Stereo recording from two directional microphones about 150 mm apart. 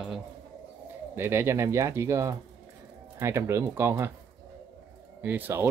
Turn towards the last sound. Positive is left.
turn(degrees=-15)  # may be behind; listen again after turning